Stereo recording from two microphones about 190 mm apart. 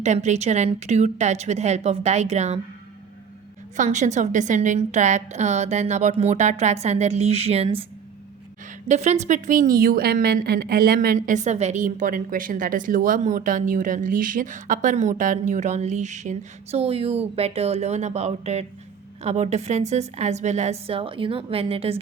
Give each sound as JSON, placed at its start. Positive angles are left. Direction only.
{"t": 0.0, "sound": "a woman's voice", "side_deg": -35}
{"t": 3.8, "sound": "a woman's voice", "side_deg": -40}
{"t": 8.9, "sound": "a woman's voice", "side_deg": -35}